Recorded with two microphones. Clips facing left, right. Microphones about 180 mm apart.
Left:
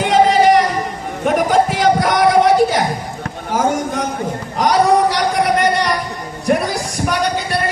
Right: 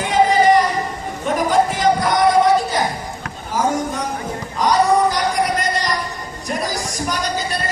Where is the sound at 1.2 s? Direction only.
65° left (ahead or behind).